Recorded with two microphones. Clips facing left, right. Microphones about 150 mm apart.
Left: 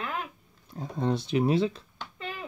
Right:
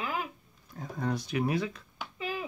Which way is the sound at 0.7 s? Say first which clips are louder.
Left 4 dB; 25° left (ahead or behind).